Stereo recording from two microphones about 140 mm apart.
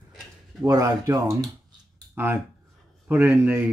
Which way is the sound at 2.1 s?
15° right (ahead or behind).